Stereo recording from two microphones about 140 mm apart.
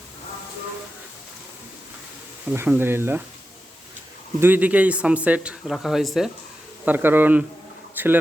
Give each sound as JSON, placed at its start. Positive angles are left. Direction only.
{"t": 2.5, "sound": "a man's voice", "side_deg": -15}
{"t": 4.4, "sound": "a man's voice", "side_deg": -15}
{"t": 6.8, "sound": "a man's voice", "side_deg": -15}